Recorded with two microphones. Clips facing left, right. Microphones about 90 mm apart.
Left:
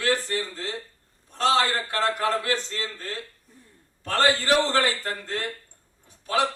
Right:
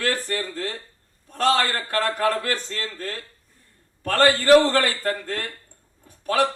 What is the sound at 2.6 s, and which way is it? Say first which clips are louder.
A man's voice: right 2 dB; 20° left (ahead or behind).